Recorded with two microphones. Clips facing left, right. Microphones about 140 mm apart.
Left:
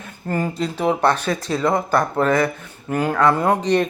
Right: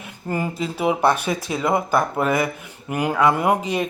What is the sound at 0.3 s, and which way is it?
Speech, 10° right (ahead or behind).